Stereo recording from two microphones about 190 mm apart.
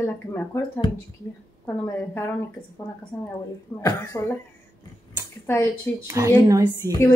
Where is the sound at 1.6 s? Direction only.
15° left (ahead or behind).